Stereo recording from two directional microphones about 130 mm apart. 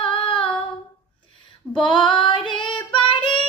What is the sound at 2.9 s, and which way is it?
Child singing, 40° left (ahead or behind).